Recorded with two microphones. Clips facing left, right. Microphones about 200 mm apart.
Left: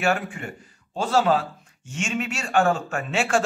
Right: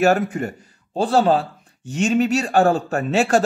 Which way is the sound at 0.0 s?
40° right (ahead or behind).